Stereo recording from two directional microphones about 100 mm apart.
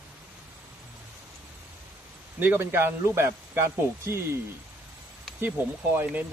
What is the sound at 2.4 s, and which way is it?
A man's voice, 20° right (ahead or behind).